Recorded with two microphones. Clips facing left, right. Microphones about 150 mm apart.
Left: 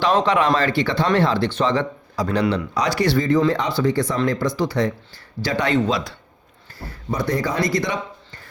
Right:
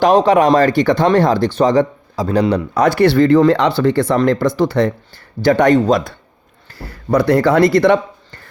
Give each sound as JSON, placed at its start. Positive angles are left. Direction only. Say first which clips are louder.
{"t": 0.0, "sound": "speech", "louder": "right 7 dB", "side_deg": -40}
{"t": 2.7, "sound": "speech", "louder": "right 10 dB", "side_deg": -55}
{"t": 6.7, "sound": "speech", "louder": "right 10 dB", "side_deg": -75}